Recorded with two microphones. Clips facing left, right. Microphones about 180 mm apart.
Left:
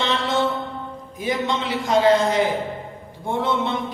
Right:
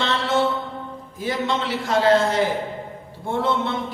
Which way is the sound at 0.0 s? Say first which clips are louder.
Even; 15° left (ahead or behind).